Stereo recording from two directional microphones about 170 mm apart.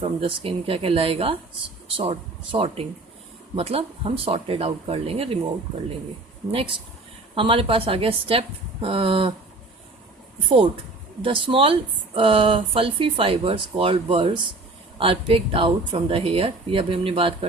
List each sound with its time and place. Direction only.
0.0 s speech: 35° right (ahead or behind)
6.5 s speech: 35° right (ahead or behind)
11.2 s speech: 30° right (ahead or behind)